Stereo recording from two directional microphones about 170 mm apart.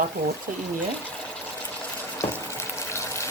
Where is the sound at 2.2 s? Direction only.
15° left (ahead or behind).